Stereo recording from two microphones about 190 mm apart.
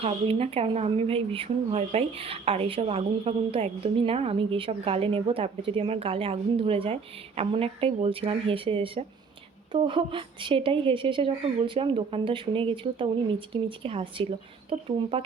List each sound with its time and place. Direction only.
0.0 s speech: 30° right (ahead or behind)